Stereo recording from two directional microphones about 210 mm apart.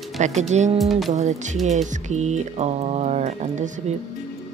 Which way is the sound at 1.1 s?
35° right (ahead or behind).